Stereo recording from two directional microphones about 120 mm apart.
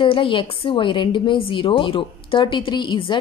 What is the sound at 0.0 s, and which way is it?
A woman's voice, 45° left (ahead or behind).